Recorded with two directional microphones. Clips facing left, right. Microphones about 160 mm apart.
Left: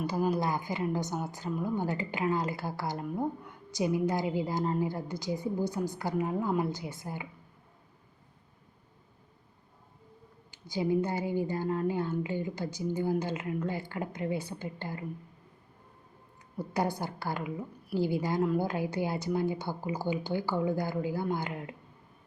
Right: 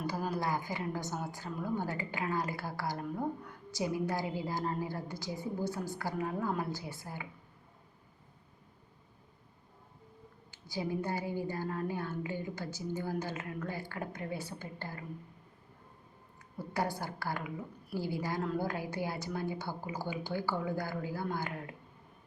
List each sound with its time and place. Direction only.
0.1 s a woman's voice: 20° left (ahead or behind)
10.5 s a woman's voice: 20° left (ahead or behind)
17.0 s a woman's voice: 20° left (ahead or behind)